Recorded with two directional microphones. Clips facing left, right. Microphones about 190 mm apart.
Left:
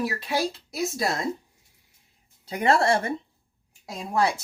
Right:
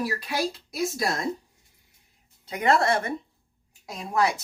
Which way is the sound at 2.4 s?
30° left (ahead or behind).